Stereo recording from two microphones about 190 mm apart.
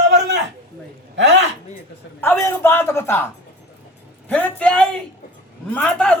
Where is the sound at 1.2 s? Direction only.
70° right (ahead or behind).